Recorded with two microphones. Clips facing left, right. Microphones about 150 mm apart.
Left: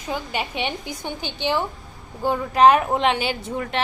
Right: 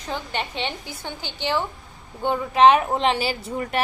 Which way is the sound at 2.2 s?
Centre (ahead or behind).